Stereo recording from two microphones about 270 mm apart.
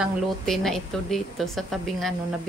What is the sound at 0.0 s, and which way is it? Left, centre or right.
Speech, centre.